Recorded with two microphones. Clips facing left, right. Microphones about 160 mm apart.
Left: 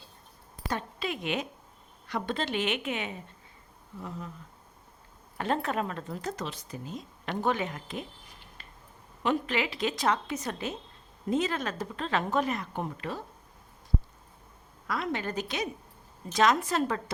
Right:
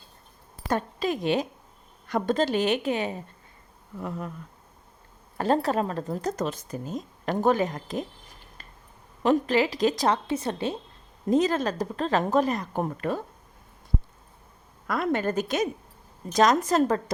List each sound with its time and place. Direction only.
0.7 s speech: 45° right (ahead or behind)
5.4 s speech: 35° right (ahead or behind)
9.2 s speech: 40° right (ahead or behind)
14.8 s a woman's voice: 50° right (ahead or behind)